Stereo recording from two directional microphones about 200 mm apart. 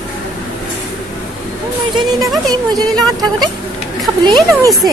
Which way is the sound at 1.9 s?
20° right (ahead or behind).